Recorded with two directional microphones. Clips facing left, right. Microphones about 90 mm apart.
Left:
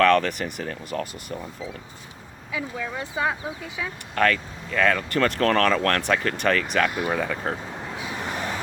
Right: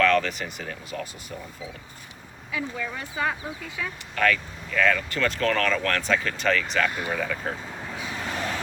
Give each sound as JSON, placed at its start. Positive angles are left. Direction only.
{"t": 0.1, "sound": "speech", "side_deg": 55}
{"t": 2.5, "sound": "speech", "side_deg": 10}
{"t": 4.2, "sound": "speech", "side_deg": 40}
{"t": 7.1, "sound": "speech", "side_deg": 30}
{"t": 7.9, "sound": "vehicle", "side_deg": 15}